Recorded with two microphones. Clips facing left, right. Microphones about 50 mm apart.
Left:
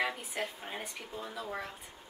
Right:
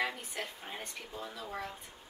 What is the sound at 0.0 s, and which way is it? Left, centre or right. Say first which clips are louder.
Speech: left 2 dB; centre.